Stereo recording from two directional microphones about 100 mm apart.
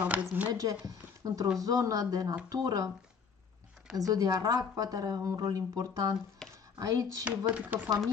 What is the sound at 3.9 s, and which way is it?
Speech, 35° right (ahead or behind).